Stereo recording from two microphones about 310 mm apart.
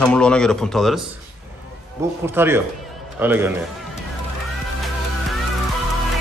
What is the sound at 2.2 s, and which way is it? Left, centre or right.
A man's voice, centre.